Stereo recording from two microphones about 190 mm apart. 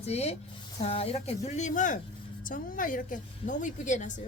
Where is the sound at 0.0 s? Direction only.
35° left (ahead or behind).